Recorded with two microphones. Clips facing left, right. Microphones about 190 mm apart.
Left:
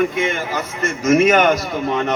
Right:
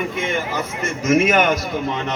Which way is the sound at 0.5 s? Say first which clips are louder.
Left 2 dB; 50° left (ahead or behind).